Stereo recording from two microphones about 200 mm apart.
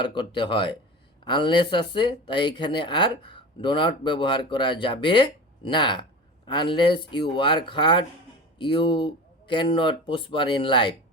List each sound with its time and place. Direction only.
0.0 s speech: 25° left (ahead or behind)